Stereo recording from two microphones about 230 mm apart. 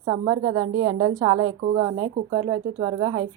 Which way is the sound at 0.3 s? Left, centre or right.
Centre.